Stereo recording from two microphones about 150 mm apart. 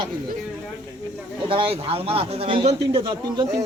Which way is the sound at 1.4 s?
35° right (ahead or behind).